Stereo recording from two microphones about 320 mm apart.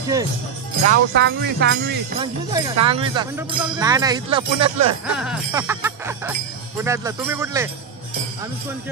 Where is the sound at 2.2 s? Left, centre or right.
Centre.